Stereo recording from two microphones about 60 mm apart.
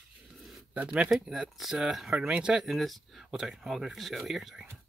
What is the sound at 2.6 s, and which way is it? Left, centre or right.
Speech, centre.